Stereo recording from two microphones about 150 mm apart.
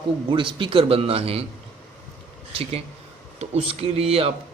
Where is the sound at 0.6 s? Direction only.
35° right (ahead or behind).